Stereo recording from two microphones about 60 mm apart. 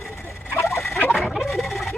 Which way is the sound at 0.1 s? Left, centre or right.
Left.